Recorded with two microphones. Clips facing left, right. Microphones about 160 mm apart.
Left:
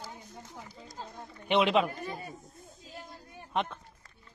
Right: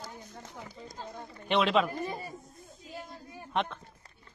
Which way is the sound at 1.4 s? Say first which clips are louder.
Left 1 dB; 15° left (ahead or behind).